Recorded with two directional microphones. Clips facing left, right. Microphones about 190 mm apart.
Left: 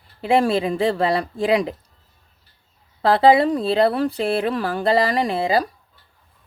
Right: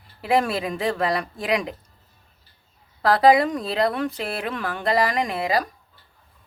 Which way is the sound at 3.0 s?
25° left (ahead or behind).